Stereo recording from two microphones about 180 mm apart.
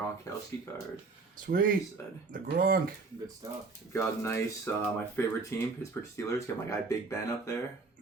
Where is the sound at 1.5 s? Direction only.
50° right (ahead or behind).